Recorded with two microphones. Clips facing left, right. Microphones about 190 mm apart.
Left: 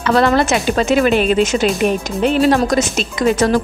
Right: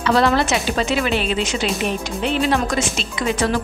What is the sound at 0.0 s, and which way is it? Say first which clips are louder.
A woman's voice: left 3 dB; 50° left (ahead or behind).